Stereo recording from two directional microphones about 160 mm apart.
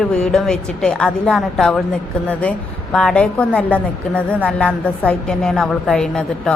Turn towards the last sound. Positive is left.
turn(degrees=5)  # may be behind; listen again after turning